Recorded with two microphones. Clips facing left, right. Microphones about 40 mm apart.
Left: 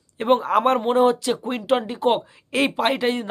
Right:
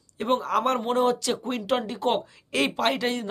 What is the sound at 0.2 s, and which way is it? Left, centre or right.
Speech, left.